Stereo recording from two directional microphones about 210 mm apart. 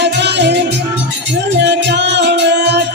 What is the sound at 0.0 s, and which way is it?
Music, 55° right (ahead or behind).